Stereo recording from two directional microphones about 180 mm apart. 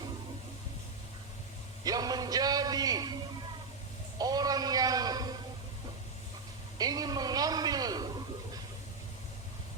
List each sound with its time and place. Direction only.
1.8 s a man's voice: 20° right (ahead or behind)
4.2 s a man's voice: 20° right (ahead or behind)
6.7 s a sound: 20° right (ahead or behind)